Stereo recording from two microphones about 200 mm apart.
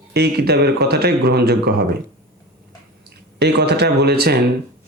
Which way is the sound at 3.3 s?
55° right (ahead or behind).